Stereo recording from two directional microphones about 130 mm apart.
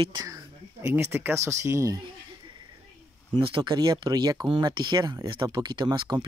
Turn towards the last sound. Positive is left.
turn(degrees=-35)  # may be behind; listen again after turning